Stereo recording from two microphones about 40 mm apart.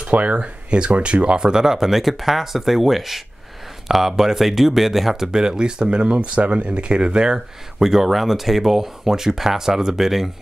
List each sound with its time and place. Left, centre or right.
0.0 s speech: right
7.8 s speech: centre